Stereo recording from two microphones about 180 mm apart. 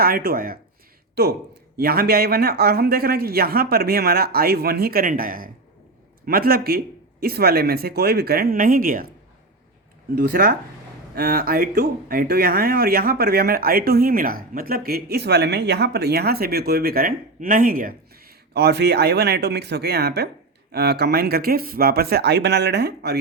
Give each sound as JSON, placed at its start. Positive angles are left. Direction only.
{"t": 0.0, "sound": "speech", "side_deg": -55}
{"t": 10.2, "sound": "speech", "side_deg": -55}